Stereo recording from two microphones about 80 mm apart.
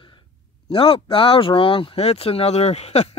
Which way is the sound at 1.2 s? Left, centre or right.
Left.